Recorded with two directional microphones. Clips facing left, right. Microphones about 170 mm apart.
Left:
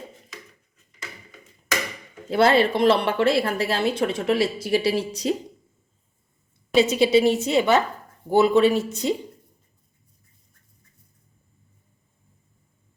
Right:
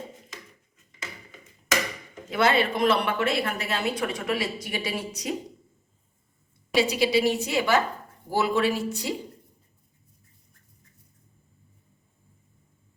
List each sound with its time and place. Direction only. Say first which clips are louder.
2.3 s speech: left 5 dB; 35° left (ahead or behind)
6.7 s a woman's voice: left 5 dB; 25° left (ahead or behind)